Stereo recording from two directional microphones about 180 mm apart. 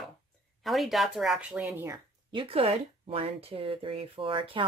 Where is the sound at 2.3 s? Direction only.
30° right (ahead or behind).